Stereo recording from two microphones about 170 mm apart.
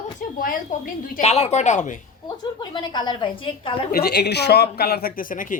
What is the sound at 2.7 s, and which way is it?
A woman's voice, 25° left (ahead or behind).